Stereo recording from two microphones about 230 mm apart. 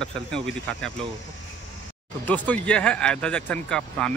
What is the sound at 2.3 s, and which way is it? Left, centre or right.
Speech, centre.